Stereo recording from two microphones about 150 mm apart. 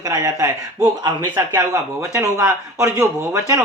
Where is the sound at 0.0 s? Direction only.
20° right (ahead or behind).